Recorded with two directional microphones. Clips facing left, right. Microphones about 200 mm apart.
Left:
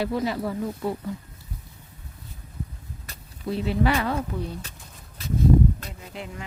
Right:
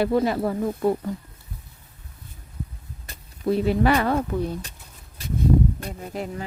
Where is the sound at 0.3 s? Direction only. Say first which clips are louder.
Right 4 dB; 50° right (ahead or behind).